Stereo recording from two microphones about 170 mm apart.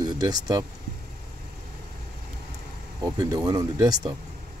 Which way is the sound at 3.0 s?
20° right (ahead or behind).